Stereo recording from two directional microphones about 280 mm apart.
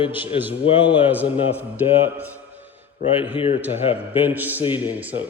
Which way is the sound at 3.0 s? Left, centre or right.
Centre.